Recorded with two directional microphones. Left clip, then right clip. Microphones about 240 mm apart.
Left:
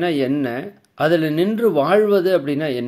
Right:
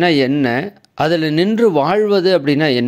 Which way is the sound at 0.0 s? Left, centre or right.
Right.